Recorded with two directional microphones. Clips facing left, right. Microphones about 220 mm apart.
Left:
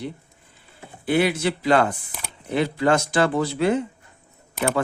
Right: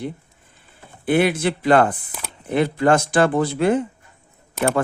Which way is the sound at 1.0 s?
55° right (ahead or behind).